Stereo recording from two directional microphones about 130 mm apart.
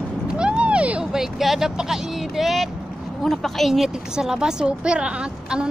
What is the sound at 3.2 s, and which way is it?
A woman's voice, centre (ahead or behind).